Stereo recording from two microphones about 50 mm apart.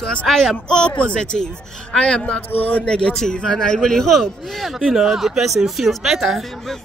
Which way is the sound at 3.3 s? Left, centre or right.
Centre.